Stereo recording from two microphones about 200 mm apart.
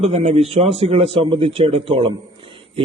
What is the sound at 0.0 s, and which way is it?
A man's voice, 30° right (ahead or behind).